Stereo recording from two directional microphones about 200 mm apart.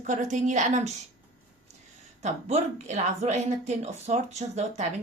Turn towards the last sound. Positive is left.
turn(degrees=-35)  # may be behind; listen again after turning